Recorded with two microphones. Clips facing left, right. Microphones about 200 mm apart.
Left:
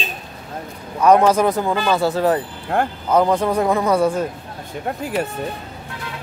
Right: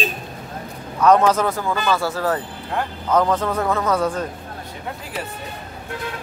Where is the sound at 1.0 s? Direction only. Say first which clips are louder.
Left 2 dB; 10° left (ahead or behind).